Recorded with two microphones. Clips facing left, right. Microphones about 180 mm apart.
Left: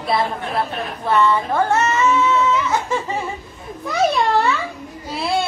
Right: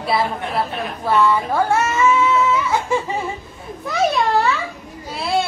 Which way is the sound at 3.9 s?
Centre (ahead or behind).